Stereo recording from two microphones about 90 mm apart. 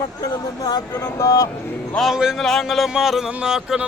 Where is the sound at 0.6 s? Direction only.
50° left (ahead or behind).